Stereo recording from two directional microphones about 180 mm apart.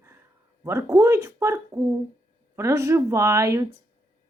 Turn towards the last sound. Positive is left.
turn(degrees=-15)  # may be behind; listen again after turning